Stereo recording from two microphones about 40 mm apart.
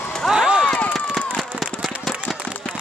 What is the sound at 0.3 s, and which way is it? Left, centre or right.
Run, right.